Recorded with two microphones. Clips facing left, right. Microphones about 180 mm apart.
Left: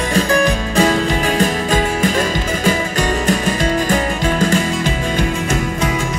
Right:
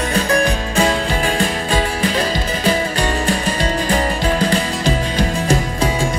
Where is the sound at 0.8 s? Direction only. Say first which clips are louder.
Left 2 dB; 40° left (ahead or behind).